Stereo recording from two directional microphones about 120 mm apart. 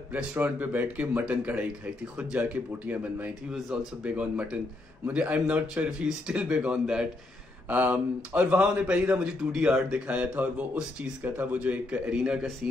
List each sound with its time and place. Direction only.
0.1 s speech: 15° right (ahead or behind)